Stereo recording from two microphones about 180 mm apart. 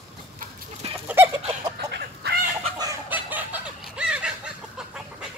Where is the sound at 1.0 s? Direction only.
10° right (ahead or behind).